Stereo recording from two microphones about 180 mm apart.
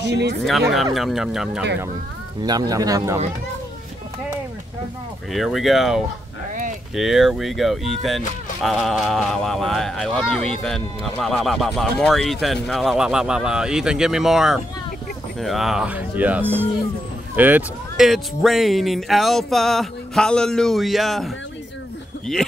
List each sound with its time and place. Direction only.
0.1 s speech: 65° right (ahead or behind)
0.5 s speech: centre (ahead or behind)
2.4 s speech: 20° right (ahead or behind)
5.3 s speech: centre (ahead or behind)